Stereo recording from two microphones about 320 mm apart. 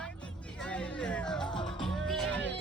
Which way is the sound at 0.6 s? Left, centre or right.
Centre.